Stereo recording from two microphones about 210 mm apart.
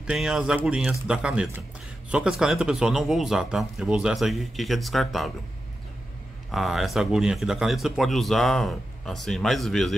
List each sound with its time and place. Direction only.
0.0 s speech: 5° right (ahead or behind)
6.5 s speech: centre (ahead or behind)